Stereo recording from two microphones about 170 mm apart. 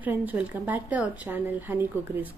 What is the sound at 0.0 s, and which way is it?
A woman's voice, 10° right (ahead or behind).